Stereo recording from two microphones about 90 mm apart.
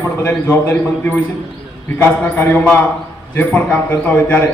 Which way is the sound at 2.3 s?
25° left (ahead or behind).